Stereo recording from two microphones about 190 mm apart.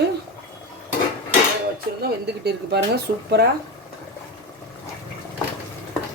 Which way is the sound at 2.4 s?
60° right (ahead or behind).